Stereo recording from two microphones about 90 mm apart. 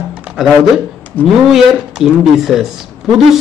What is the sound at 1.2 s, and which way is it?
Speech, 20° left (ahead or behind).